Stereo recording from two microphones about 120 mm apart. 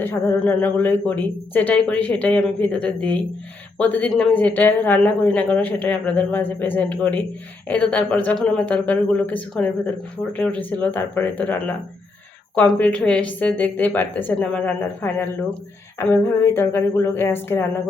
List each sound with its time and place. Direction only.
0.0 s a woman's voice: 15° left (ahead or behind)
12.8 s a woman's voice: 10° left (ahead or behind)
16.2 s a sound: 20° left (ahead or behind)